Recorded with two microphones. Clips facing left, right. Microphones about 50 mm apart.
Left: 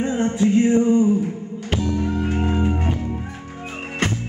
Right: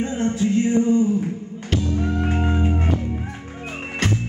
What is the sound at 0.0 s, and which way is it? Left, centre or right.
Music, centre.